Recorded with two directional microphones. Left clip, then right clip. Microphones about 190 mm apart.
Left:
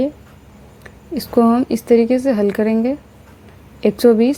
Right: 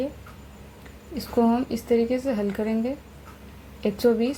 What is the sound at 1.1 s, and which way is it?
Speech, 50° left (ahead or behind).